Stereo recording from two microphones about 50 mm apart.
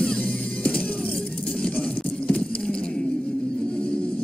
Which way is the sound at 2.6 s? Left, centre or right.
Centre.